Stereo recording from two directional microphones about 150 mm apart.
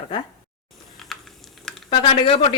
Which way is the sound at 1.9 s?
40° left (ahead or behind).